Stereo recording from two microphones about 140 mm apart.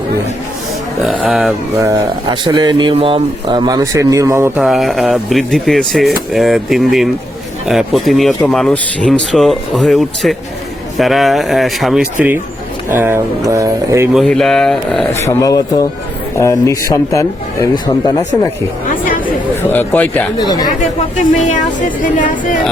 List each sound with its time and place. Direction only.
1.0 s speech: 5° right (ahead or behind)
1.8 s speech: 20° right (ahead or behind)
2.3 s a man's voice: 35° right (ahead or behind)
3.7 s speech: 25° right (ahead or behind)
4.5 s speech: 5° right (ahead or behind)
12.9 s speech: 15° right (ahead or behind)
14.1 s speech: centre (ahead or behind)
15.1 s a man's voice: 20° left (ahead or behind)
19.6 s speech: 15° left (ahead or behind)
20.4 s speech: 30° left (ahead or behind)
22.0 s speech: 70° left (ahead or behind)